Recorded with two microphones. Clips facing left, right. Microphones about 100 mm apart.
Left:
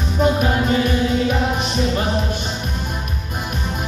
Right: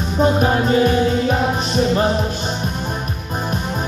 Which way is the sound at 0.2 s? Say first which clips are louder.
Right 2 dB; 35° right (ahead or behind).